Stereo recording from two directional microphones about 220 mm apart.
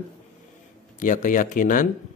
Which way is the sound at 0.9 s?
35° left (ahead or behind).